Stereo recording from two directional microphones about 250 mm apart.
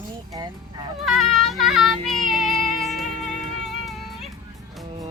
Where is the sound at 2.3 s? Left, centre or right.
Centre.